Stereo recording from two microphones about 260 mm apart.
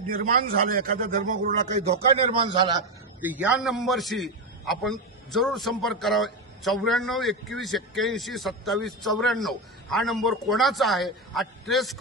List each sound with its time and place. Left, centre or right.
0.7 s a man's voice: right; by 2.8 s centre
3.2 s a man's voice: centre